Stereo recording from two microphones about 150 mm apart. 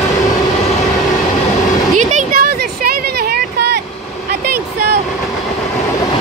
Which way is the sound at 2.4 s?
90° right.